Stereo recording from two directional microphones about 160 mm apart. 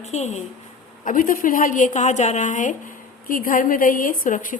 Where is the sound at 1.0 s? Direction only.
55° left (ahead or behind).